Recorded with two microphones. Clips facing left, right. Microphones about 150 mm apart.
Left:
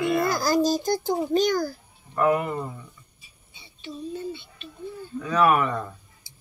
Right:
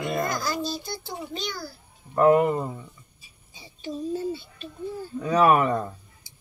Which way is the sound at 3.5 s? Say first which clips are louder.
Right 4 dB; 40° right (ahead or behind).